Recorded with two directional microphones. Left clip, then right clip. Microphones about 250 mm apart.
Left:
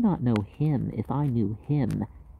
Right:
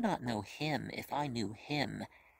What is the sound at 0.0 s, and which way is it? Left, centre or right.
Speech, right.